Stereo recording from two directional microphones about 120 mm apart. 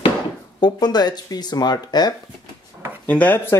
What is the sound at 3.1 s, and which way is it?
Speech, 10° left (ahead or behind).